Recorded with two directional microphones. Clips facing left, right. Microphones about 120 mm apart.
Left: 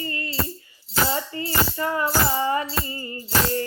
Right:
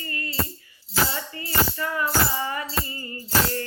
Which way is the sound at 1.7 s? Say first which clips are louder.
Left 2 dB; 25° left (ahead or behind).